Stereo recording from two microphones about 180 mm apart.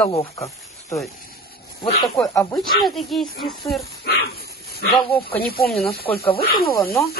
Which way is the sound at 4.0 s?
65° left (ahead or behind).